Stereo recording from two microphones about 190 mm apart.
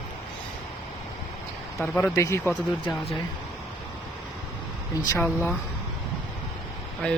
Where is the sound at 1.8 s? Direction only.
10° left (ahead or behind).